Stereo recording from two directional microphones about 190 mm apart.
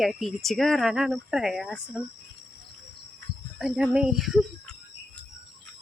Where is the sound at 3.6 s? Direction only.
5° right (ahead or behind).